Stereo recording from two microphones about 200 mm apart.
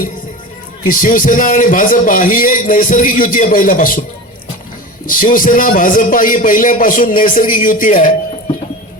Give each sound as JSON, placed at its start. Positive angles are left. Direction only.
{"t": 0.9, "sound": "a man's voice", "side_deg": 40}
{"t": 5.0, "sound": "a man's voice", "side_deg": 45}